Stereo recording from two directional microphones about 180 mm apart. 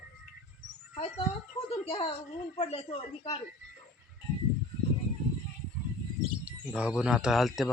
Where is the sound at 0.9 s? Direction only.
35° left (ahead or behind).